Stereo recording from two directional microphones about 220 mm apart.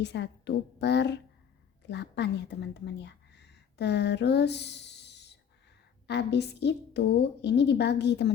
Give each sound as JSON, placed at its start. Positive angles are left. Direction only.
{"t": 0.0, "sound": "a woman's voice", "side_deg": 50}